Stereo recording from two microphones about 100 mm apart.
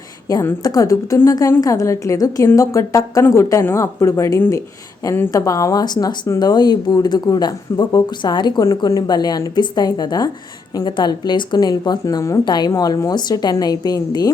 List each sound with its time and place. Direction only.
0.3 s a woman's voice: 40° left (ahead or behind)